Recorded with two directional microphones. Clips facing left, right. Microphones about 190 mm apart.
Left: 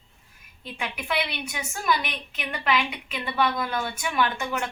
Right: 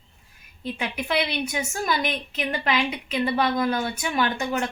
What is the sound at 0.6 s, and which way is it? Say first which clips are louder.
A woman's voice: right 5 dB; 35° right (ahead or behind).